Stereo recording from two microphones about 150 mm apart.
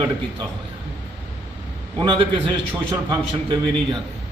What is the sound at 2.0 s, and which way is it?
A man's voice, 35° right (ahead or behind).